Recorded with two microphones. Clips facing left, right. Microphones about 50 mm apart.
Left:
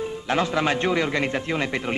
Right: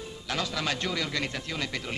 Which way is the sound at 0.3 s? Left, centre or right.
Left.